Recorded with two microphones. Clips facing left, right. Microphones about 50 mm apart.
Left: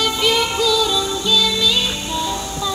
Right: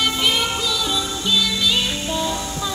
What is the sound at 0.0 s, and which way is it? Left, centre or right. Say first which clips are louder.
Music: left 2 dB; right.